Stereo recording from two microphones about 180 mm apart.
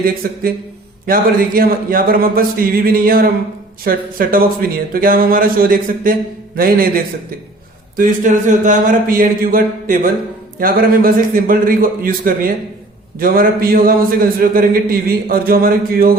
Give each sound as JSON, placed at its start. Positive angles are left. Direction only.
{"t": 0.0, "sound": "a man's voice", "side_deg": -55}